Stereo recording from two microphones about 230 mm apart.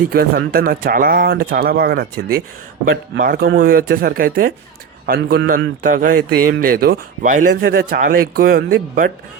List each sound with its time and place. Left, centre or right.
0.1 s a man's voice: right